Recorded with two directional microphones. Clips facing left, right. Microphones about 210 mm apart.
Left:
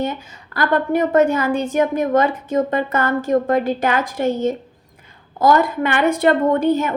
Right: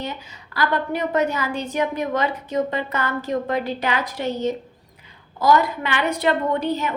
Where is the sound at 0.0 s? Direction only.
50° left (ahead or behind).